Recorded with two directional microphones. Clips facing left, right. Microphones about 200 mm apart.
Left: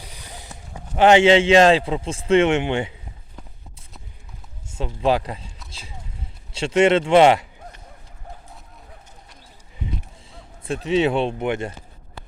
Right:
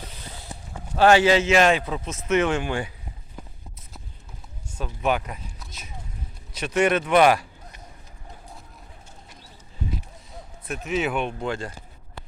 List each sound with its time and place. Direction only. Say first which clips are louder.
0.0 s a sound: even; 15° left (ahead or behind)
0.9 s a man's voice: left 3 dB; 20° left (ahead or behind)
4.7 s speech: left 4 dB; 30° left (ahead or behind)
6.5 s a man's voice: left 5 dB; 25° left (ahead or behind)
10.7 s a man's voice: left 6 dB; 30° left (ahead or behind)